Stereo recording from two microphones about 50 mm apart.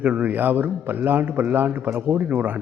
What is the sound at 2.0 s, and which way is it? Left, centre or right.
Speech, right.